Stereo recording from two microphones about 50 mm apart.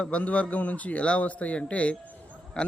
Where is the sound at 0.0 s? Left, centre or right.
Left.